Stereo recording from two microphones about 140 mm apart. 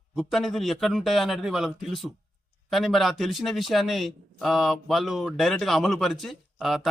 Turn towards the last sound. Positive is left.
turn(degrees=0)  # may be behind; listen again after turning